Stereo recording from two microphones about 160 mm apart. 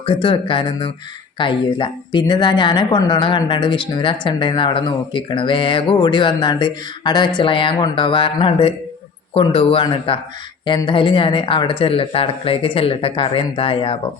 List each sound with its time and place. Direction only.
0.0 s a woman's voice: 35° left (ahead or behind)